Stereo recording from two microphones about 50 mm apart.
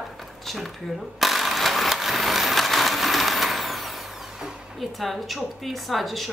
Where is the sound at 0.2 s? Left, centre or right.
Centre.